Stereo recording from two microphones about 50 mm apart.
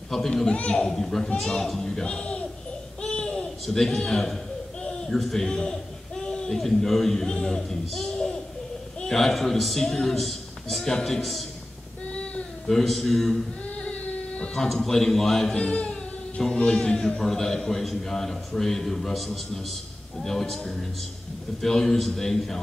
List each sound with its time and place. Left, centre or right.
0.4 s a man's voice: centre
3.0 s a sound: centre
5.2 s a man's voice: centre
12.1 s a sound: left
12.6 s a man's voice: centre
14.4 s a man's voice: centre
15.5 s a man's voice: left; by 22.6 s centre